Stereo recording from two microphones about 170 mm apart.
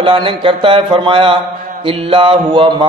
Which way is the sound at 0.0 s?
30° right (ahead or behind).